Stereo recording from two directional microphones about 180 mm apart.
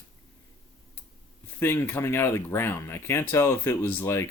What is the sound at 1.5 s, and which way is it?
Speech, 15° left (ahead or behind).